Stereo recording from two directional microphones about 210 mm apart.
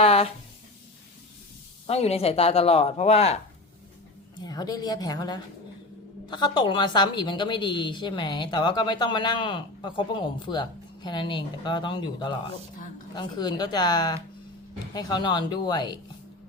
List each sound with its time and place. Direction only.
0.0 s a sound: 25° left (ahead or behind)
1.9 s a woman's voice: 30° left (ahead or behind)
4.4 s a woman's voice: 20° left (ahead or behind)